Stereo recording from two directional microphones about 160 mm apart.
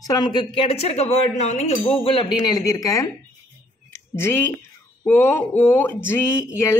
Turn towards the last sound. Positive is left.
turn(degrees=15)  # may be behind; listen again after turning